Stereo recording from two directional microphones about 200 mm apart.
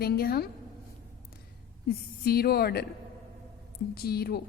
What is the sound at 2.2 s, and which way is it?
Speech, 50° left (ahead or behind).